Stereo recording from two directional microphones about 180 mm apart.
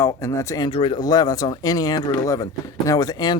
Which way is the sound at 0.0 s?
15° left (ahead or behind).